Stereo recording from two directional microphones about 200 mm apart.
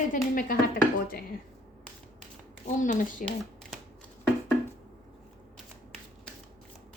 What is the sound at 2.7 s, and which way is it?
Speech, 40° left (ahead or behind).